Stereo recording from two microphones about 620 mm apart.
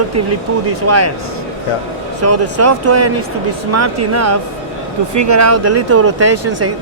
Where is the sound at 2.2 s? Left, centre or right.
Right.